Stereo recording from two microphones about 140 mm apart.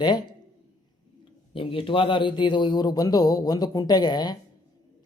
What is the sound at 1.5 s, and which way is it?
Mantra, 40° left (ahead or behind).